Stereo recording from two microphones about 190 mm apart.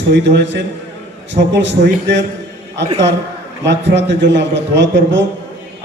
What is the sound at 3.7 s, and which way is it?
A man's voice, 70° right (ahead or behind).